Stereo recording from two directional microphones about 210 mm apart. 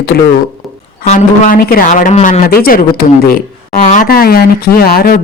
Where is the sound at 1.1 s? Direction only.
35° left (ahead or behind).